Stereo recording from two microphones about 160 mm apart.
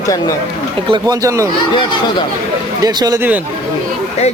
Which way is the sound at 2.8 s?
25° right (ahead or behind).